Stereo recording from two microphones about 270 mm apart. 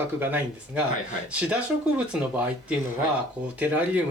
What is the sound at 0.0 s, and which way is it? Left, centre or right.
Speech, centre.